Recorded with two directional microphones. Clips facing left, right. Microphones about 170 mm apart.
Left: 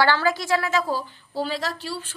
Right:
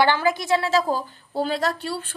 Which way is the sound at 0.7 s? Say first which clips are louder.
Right 3 dB; 40° right (ahead or behind).